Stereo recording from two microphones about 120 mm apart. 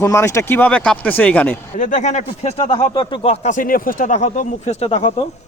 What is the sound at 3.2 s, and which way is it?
Speech, 75° left (ahead or behind).